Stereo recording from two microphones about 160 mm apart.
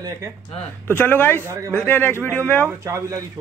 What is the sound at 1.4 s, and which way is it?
Speech, 15° right (ahead or behind).